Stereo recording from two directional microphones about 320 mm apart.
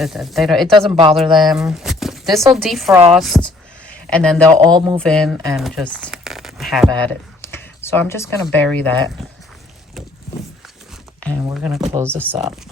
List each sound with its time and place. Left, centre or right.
0.0 s speech: centre
0.9 s a man's voice: centre
1.4 s speech: centre
4.4 s a man's voice: centre
5.0 s speech: centre
11.5 s a man's voice: centre